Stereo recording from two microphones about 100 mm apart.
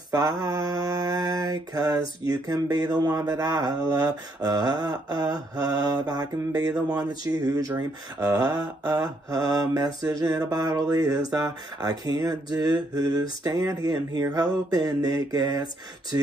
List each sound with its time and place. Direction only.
0.1 s mantra: 35° right (ahead or behind)